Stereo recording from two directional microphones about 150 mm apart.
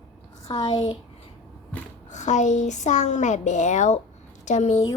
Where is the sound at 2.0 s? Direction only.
55° left (ahead or behind).